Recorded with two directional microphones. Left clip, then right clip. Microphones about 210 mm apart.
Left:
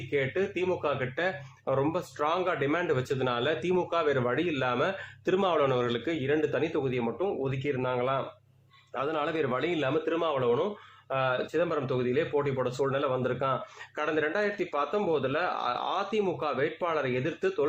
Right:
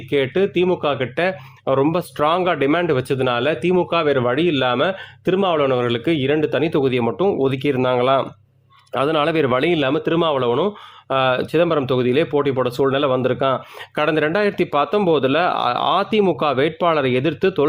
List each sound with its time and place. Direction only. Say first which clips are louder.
0.1 s speech: right 11 dB; 50° right (ahead or behind)